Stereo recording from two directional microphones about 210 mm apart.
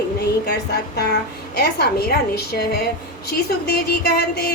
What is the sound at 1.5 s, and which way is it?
Speech, 50° left (ahead or behind).